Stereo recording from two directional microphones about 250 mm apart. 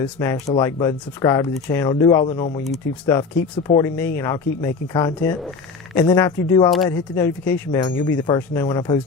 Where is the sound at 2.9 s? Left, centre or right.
Centre.